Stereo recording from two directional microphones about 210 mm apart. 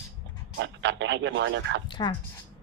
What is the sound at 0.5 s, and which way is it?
Speech, 55° right (ahead or behind).